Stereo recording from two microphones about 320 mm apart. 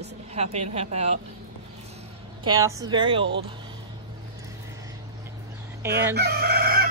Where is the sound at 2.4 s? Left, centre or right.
Centre.